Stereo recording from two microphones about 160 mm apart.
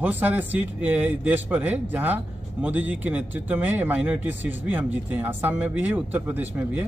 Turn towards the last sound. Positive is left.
turn(degrees=-10)  # may be behind; listen again after turning